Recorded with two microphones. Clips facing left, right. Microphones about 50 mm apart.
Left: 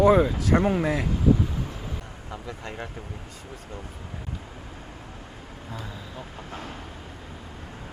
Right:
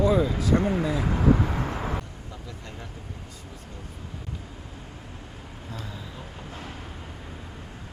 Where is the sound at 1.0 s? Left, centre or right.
Right.